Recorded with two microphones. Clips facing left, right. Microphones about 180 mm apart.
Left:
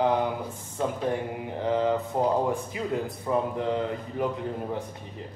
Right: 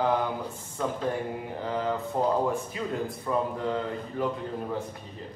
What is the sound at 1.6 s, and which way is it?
A man's voice, 20° left (ahead or behind).